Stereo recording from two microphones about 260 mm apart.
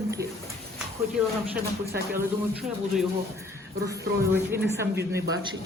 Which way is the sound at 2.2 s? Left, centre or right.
Centre.